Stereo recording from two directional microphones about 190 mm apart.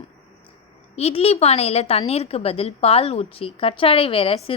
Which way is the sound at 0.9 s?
30° left (ahead or behind).